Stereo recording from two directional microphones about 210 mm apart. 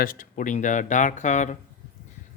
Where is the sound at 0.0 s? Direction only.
40° left (ahead or behind).